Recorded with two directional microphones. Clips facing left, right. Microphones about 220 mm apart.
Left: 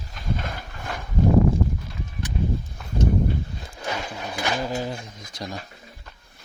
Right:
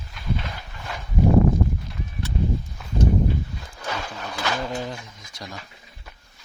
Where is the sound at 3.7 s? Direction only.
20° left (ahead or behind); by 4.9 s 5° left (ahead or behind).